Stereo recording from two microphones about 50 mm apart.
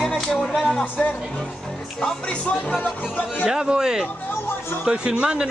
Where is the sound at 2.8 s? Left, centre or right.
Left.